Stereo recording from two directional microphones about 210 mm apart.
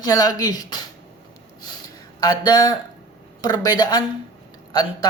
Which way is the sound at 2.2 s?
20° left (ahead or behind).